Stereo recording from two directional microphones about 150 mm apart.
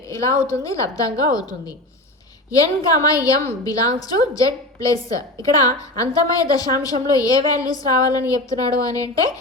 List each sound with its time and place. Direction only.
0.1 s a woman's voice: 20° left (ahead or behind)
2.5 s a woman's voice: 25° left (ahead or behind)